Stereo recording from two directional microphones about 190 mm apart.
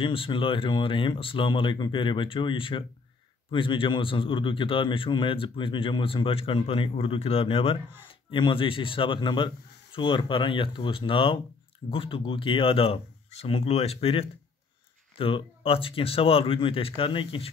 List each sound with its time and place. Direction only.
0.0 s a man's voice: 30° left (ahead or behind)